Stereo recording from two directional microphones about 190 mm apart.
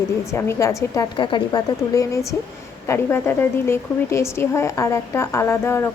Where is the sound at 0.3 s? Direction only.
15° left (ahead or behind).